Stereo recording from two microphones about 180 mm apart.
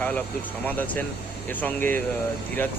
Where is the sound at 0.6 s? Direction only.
10° left (ahead or behind).